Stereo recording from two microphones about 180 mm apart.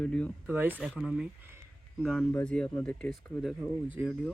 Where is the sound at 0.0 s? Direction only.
5° left (ahead or behind).